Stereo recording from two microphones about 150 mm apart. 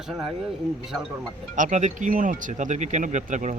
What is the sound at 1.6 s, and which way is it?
Speech, 55° right (ahead or behind).